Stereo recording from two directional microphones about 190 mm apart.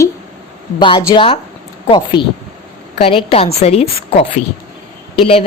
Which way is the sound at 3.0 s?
30° left (ahead or behind).